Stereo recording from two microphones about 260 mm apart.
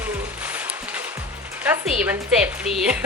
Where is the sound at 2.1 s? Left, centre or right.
Centre.